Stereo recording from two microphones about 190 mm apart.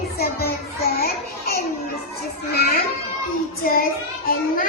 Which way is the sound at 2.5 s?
55° left (ahead or behind).